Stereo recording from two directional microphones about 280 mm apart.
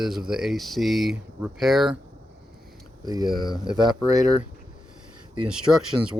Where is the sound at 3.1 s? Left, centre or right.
Centre.